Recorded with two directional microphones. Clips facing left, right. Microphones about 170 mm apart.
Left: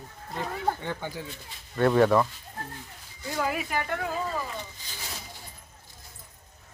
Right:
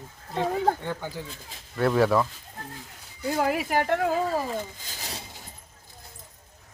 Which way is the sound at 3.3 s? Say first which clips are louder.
Right 4 dB; 65° right (ahead or behind).